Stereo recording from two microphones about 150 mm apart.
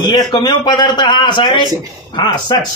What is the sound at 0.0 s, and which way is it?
A man's voice, 30° left (ahead or behind).